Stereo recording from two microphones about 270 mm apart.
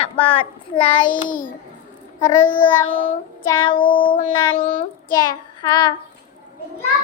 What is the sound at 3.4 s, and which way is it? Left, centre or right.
Child singing, centre.